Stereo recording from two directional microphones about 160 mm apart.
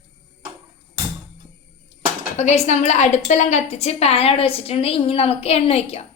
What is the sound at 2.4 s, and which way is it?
A woman's voice, 45° left (ahead or behind).